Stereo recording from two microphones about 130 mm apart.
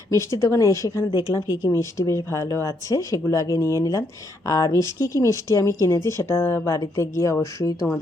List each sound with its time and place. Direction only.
0.1 s speech: 25° left (ahead or behind)